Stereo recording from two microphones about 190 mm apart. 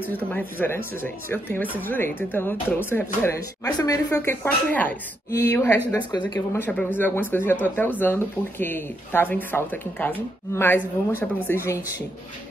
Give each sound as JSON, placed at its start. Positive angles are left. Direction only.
{"t": 0.3, "sound": "speech", "side_deg": 10}
{"t": 6.5, "sound": "speech", "side_deg": 10}